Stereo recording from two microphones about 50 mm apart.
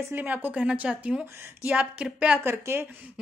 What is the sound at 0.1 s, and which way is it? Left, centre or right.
A woman's voice, right.